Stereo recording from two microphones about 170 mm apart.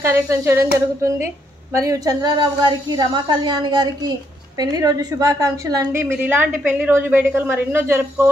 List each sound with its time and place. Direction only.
0.0 s a woman's voice: 15° right (ahead or behind)
6.2 s a woman's voice: 10° right (ahead or behind)